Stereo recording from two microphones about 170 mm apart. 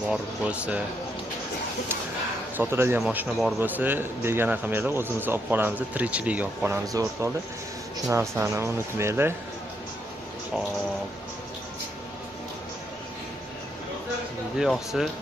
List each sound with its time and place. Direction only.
0.1 s a man's voice: 10° right (ahead or behind)
2.5 s a man's voice: 15° right (ahead or behind)
14.6 s speech: centre (ahead or behind)